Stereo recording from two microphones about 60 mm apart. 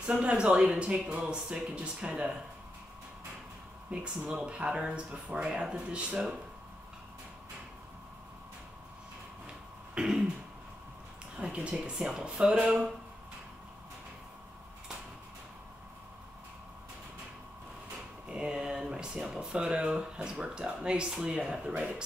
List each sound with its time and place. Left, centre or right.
0.0 s speech: centre
4.2 s speech: centre
9.9 s throat clearing: centre
11.5 s speech: centre
18.3 s a sound: centre
19.6 s speech: centre